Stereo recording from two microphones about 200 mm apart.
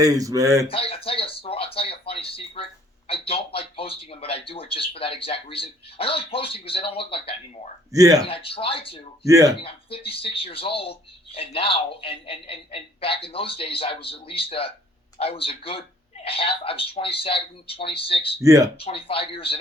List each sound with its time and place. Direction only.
0.0 s speech: 15° right (ahead or behind)
0.7 s a sound: 30° left (ahead or behind)
3.1 s speech: 30° left (ahead or behind)
7.9 s speech: 15° right (ahead or behind)
8.3 s speech: 30° left (ahead or behind)
9.2 s speech: 15° right (ahead or behind)
9.6 s speech: 30° left (ahead or behind)
18.4 s speech: 15° right (ahead or behind)
18.8 s speech: 30° left (ahead or behind)